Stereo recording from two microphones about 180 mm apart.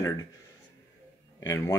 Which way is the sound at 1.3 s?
15° left (ahead or behind).